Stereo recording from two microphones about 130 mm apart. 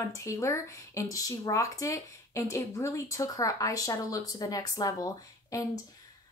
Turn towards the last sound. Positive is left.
turn(degrees=25)  # may be behind; listen again after turning